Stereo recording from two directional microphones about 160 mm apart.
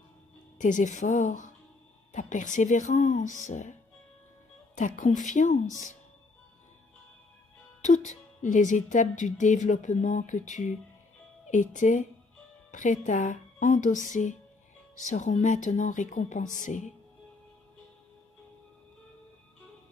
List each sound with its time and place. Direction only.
0.6 s speech: 50° left (ahead or behind)
4.7 s speech: 50° left (ahead or behind)
7.8 s speech: 50° left (ahead or behind)